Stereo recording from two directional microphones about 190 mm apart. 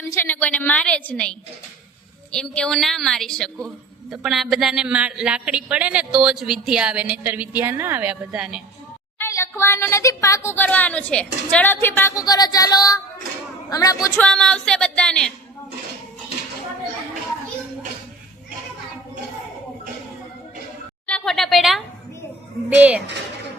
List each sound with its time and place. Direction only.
0.1 s speech: 10° left (ahead or behind)
9.1 s a man's voice: 10° left (ahead or behind)
14.2 s a sound: 5° left (ahead or behind)
21.1 s speech: centre (ahead or behind)